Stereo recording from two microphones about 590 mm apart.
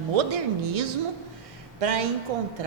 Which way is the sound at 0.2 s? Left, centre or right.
Right.